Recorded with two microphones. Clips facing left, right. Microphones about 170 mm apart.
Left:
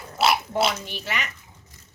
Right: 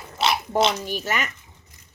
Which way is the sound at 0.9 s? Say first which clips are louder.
Right 5 dB; 45° right (ahead or behind).